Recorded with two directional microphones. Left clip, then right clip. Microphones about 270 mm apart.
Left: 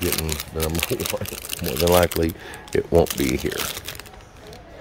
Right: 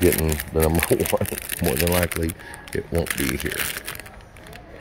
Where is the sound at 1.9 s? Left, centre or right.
Centre.